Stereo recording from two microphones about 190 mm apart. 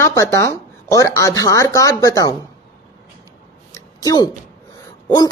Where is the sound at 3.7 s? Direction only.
20° left (ahead or behind).